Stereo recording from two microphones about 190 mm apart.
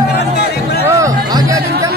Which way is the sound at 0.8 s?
15° right (ahead or behind).